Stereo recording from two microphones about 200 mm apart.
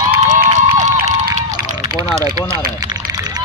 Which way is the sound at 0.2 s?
35° right (ahead or behind).